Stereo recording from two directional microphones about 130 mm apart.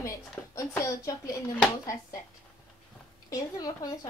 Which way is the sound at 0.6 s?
25° left (ahead or behind).